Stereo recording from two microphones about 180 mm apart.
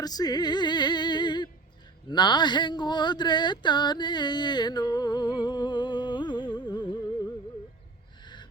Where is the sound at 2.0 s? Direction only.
25° left (ahead or behind).